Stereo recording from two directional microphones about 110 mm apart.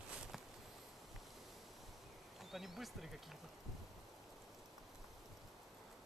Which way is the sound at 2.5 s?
Centre (ahead or behind).